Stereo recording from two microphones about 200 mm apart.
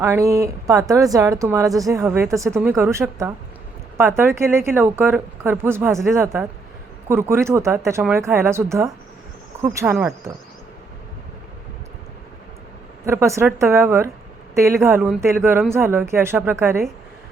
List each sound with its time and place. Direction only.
0.0 s speech: 15° right (ahead or behind)
13.1 s speech: 15° right (ahead or behind)